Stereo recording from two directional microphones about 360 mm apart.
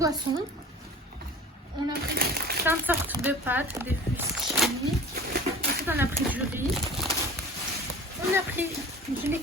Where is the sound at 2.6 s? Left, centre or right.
Centre.